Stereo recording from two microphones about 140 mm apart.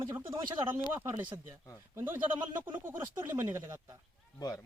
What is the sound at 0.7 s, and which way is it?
Speech, 15° right (ahead or behind).